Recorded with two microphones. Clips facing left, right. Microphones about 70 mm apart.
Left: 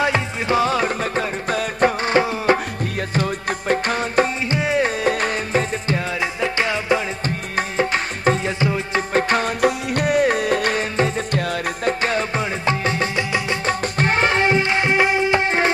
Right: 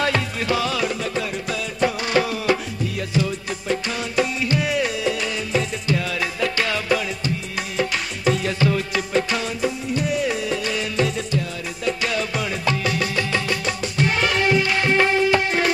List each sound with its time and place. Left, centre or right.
0.0 s music: left
2.1 s music: left
4.5 s music: left
5.0 s music: left
6.4 s music: left
7.5 s music: left
8.5 s music: left
9.1 s music: left
13.7 s music: left